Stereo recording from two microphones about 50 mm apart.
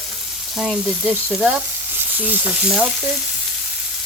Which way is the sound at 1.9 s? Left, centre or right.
Right.